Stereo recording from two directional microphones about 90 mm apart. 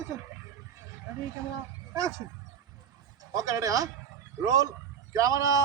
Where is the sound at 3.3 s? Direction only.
40° right (ahead or behind).